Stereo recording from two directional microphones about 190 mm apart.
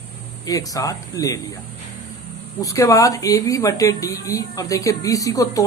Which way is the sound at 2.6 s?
15° left (ahead or behind).